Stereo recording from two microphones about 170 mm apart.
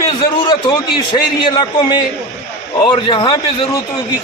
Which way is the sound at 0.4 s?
25° left (ahead or behind).